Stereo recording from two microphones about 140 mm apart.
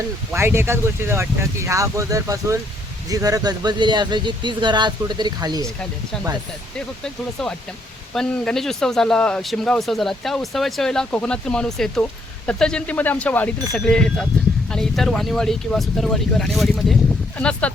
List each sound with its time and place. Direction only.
0.3 s speech: 15° right (ahead or behind)
6.7 s speech: 5° left (ahead or behind)